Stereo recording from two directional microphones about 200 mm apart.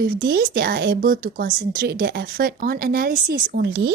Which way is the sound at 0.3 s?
45° right (ahead or behind).